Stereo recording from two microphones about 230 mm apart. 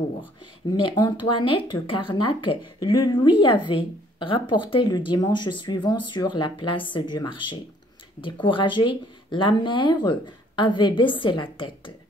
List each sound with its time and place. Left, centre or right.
0.8 s speech: centre